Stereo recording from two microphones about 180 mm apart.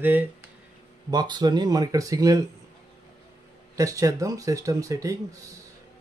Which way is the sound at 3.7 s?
20° right (ahead or behind).